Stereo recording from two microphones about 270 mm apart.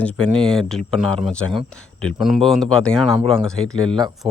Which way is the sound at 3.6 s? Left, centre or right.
Centre.